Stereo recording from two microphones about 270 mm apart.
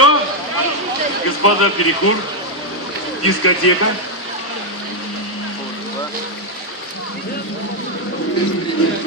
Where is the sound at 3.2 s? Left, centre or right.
Left.